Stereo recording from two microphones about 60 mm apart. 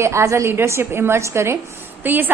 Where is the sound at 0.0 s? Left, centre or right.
Right.